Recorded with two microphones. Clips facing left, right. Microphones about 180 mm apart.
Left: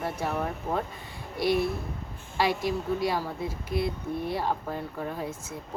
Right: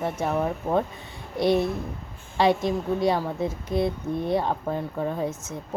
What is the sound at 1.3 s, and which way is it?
Speech, 20° right (ahead or behind).